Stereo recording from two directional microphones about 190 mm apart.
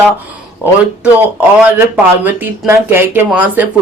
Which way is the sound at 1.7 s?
10° right (ahead or behind).